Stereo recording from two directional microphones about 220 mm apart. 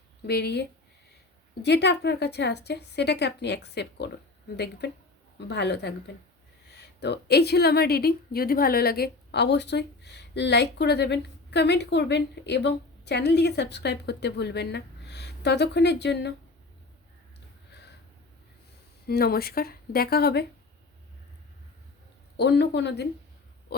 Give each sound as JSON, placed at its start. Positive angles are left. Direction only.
{"t": 0.3, "sound": "a woman's voice", "side_deg": 50}
{"t": 1.6, "sound": "a woman's voice", "side_deg": 50}
{"t": 17.7, "sound": "a sound", "side_deg": 50}
{"t": 19.0, "sound": "a woman's voice", "side_deg": 45}
{"t": 22.4, "sound": "a woman's voice", "side_deg": 50}